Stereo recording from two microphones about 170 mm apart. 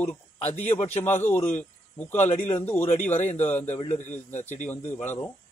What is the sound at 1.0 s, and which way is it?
A man's voice, 10° left (ahead or behind).